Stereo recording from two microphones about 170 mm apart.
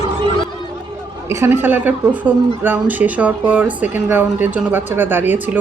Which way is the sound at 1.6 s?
10° right (ahead or behind).